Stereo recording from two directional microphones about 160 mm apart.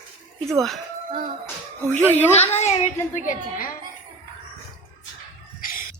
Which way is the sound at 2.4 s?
45° left (ahead or behind).